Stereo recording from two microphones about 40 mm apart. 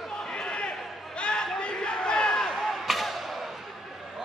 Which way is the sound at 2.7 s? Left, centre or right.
Centre.